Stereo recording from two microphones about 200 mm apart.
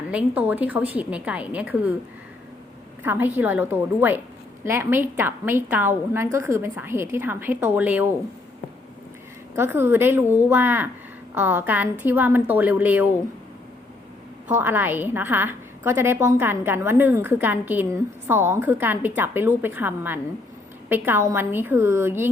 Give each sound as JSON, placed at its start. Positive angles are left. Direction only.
{"t": 0.1, "sound": "a woman's voice", "side_deg": -10}
{"t": 3.0, "sound": "a woman's voice", "side_deg": -10}
{"t": 9.6, "sound": "a woman's voice", "side_deg": -10}
{"t": 14.5, "sound": "a woman's voice", "side_deg": -10}